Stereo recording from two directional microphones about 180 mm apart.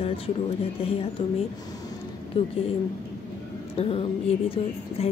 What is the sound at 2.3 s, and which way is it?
Speech, 35° left (ahead or behind).